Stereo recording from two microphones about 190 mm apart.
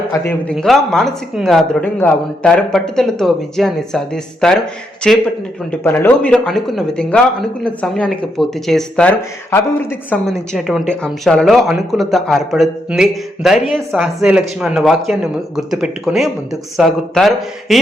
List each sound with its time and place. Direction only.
0.1 s a man's voice: 10° left (ahead or behind)